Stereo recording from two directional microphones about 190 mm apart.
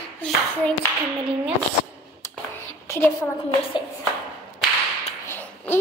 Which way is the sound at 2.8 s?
15° left (ahead or behind).